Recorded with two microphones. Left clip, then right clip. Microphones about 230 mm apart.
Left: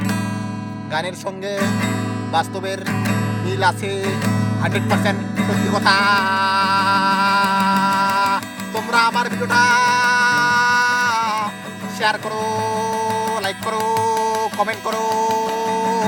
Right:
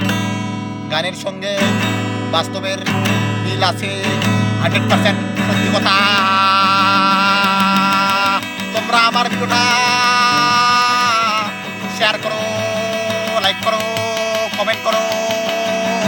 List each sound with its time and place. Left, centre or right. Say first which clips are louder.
2.9 s music: right 6 dB; right
5.8 s music: right 1 dB; centre